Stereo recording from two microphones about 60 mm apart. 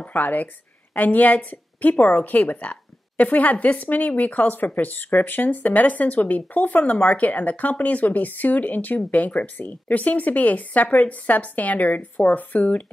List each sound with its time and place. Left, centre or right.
0.0 s a woman's voice: left